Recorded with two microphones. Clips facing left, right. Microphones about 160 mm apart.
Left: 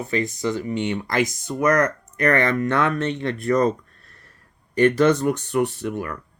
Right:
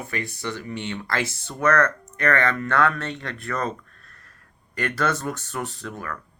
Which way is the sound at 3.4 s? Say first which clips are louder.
Left 9 dB; 40° left (ahead or behind).